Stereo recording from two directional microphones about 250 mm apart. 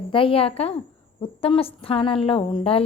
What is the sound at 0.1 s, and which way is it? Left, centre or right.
A woman's voice, left.